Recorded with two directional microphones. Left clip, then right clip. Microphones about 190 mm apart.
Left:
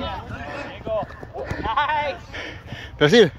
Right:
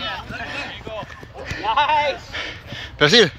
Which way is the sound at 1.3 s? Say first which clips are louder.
Right 1 dB; 30° left (ahead or behind).